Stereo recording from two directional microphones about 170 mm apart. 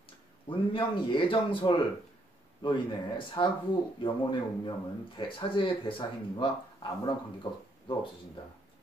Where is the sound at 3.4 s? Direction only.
30° left (ahead or behind).